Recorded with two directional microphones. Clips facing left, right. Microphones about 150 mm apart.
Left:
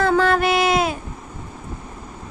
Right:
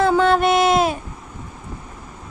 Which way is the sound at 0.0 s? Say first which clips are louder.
Right 2 dB; 20° right (ahead or behind).